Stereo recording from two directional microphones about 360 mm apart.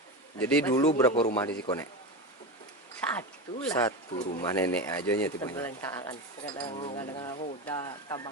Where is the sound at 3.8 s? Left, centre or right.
Left.